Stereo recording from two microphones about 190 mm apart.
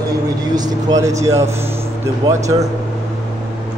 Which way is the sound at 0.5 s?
20° right (ahead or behind).